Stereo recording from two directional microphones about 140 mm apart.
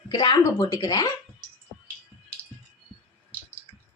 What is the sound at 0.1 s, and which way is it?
Speech, 30° left (ahead or behind).